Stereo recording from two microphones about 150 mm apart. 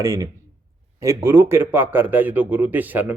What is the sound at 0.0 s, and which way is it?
A man's voice, 20° right (ahead or behind).